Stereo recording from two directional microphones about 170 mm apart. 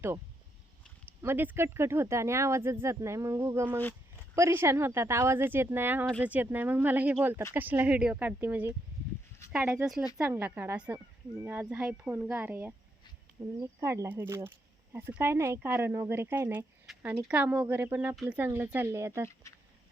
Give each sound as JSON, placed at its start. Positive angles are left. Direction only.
{"t": 1.2, "sound": "speech", "side_deg": -10}
{"t": 16.8, "sound": "a sound", "side_deg": 0}
{"t": 17.1, "sound": "speech", "side_deg": -10}